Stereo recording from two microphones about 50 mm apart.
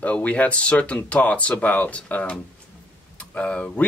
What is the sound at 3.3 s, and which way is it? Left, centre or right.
Speech, centre.